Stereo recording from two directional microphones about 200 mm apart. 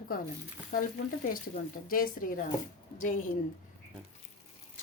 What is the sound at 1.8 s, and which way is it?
A woman's voice, 45° left (ahead or behind).